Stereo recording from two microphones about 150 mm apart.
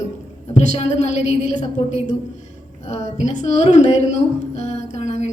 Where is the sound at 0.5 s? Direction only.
50° left (ahead or behind).